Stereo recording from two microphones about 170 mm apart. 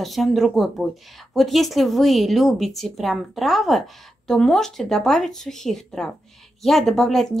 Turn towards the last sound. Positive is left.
turn(degrees=0)  # may be behind; listen again after turning